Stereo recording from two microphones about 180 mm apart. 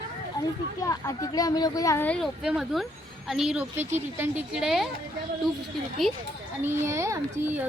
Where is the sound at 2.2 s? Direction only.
5° right (ahead or behind).